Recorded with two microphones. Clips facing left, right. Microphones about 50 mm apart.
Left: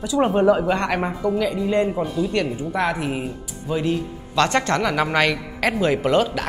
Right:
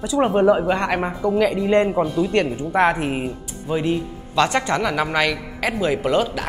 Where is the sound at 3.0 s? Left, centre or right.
Right.